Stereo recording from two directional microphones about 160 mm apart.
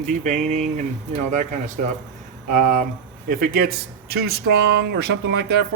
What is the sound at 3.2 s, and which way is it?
Speech, 70° right (ahead or behind).